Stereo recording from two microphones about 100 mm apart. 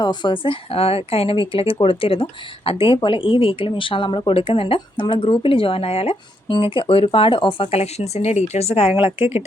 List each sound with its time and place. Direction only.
0.0 s speech: 45° left (ahead or behind); by 6.1 s 75° left (ahead or behind)
6.5 s speech: 55° left (ahead or behind)